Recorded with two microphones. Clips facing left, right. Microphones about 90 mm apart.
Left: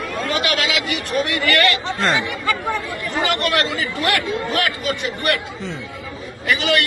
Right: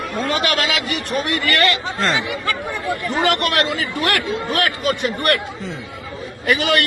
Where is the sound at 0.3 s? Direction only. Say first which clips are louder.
Right 1 dB; 45° right (ahead or behind).